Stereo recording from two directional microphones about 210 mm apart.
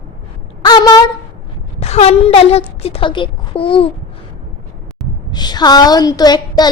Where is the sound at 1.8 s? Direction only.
30° left (ahead or behind).